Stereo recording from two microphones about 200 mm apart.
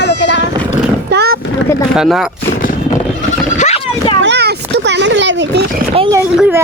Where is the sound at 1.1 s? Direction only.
55° right (ahead or behind).